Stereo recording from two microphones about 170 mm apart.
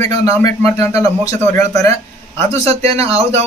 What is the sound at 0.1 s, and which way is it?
A man's voice, 35° right (ahead or behind).